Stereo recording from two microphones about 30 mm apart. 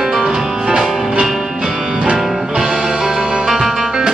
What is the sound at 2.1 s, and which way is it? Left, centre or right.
Music, centre.